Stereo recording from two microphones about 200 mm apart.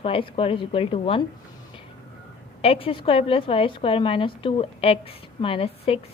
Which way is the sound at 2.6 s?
30° left (ahead or behind).